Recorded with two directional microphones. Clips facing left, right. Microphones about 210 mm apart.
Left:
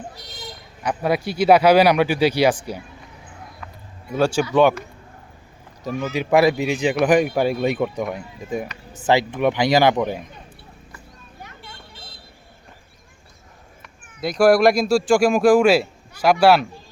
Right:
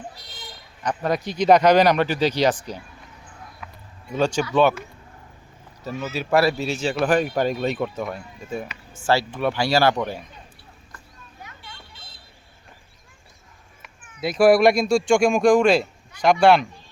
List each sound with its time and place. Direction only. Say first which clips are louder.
0.8 s speech: left 2 dB; 10° left (ahead or behind)
4.1 s speech: left 3 dB; 10° left (ahead or behind)
5.8 s speech: left 4 dB; 15° left (ahead or behind)
13.8 s speech: left 1 dB; centre (ahead or behind)